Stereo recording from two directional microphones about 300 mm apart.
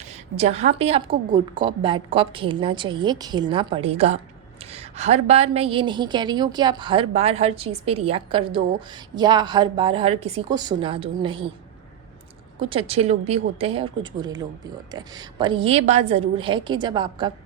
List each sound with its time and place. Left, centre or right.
0.0 s a woman's voice: right
12.5 s a woman's voice: centre